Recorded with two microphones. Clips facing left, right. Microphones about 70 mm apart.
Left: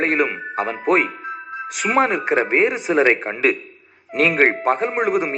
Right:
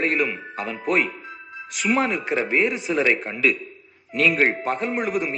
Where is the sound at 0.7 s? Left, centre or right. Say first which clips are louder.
Left 4 dB; left.